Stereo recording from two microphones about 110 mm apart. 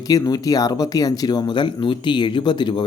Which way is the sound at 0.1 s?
35° left (ahead or behind).